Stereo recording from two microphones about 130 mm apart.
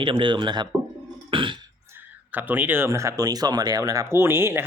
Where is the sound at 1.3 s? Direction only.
40° right (ahead or behind).